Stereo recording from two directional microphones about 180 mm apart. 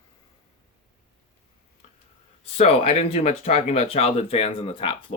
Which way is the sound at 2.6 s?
35° left (ahead or behind).